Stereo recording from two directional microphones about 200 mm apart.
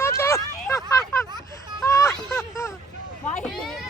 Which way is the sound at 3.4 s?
Centre (ahead or behind).